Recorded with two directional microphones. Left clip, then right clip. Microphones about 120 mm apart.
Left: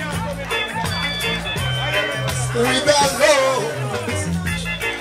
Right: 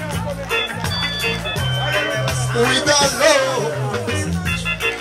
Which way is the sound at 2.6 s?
25° right (ahead or behind).